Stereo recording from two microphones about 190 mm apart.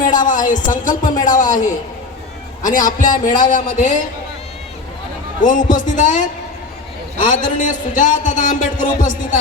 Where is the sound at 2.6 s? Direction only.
45° left (ahead or behind).